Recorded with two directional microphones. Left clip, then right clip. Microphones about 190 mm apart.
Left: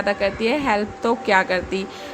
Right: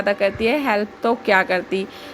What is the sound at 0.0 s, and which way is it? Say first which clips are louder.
A woman's voice: right 2 dB; 20° right (ahead or behind).